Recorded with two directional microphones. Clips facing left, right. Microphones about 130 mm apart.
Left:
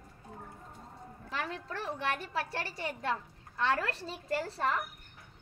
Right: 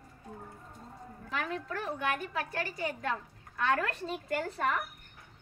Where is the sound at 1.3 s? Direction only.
30° left (ahead or behind).